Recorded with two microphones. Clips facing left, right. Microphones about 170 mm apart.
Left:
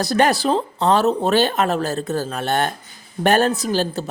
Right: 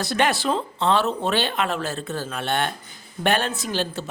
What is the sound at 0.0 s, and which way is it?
Speech, 40° left (ahead or behind).